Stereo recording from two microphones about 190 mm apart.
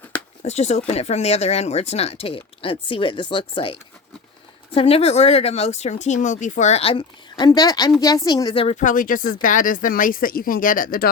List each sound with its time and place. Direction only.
0.4 s speech: 35° left (ahead or behind)